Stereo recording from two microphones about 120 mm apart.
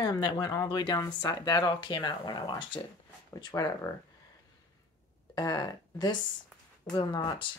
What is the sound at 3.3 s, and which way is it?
Speech, 30° left (ahead or behind).